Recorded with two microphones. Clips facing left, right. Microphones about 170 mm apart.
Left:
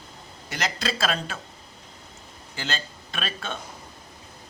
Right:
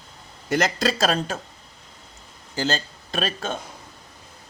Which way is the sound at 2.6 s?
40° right (ahead or behind).